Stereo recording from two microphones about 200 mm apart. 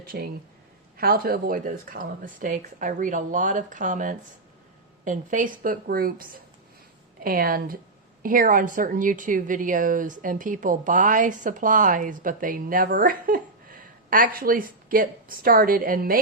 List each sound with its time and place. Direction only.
0.1 s a woman's voice: 50° right (ahead or behind)